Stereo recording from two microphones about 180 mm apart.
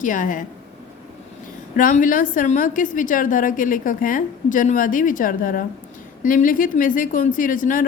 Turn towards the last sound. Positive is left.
turn(degrees=50)  # may be behind; listen again after turning